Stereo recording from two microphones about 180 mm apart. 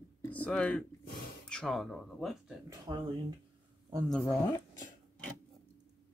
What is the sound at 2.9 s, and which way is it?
Speech, 25° right (ahead or behind).